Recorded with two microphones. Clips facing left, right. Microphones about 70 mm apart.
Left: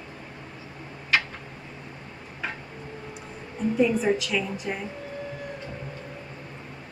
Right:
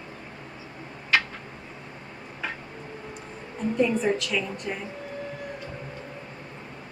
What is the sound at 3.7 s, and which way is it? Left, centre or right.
A woman's voice, centre.